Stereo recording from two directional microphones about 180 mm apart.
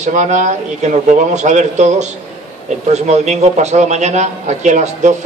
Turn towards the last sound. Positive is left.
turn(degrees=-40)  # may be behind; listen again after turning